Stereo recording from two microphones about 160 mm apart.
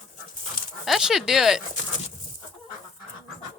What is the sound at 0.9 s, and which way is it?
Speech, centre (ahead or behind).